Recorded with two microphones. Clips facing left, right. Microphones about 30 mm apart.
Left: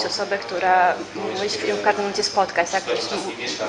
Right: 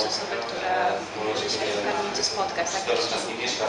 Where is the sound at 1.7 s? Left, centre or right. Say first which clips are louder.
Left 5 dB; left.